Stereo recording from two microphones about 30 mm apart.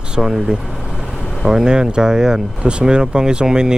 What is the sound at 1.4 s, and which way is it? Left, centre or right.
Speech, centre.